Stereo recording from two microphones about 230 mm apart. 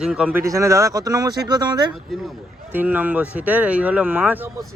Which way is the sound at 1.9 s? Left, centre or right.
Centre.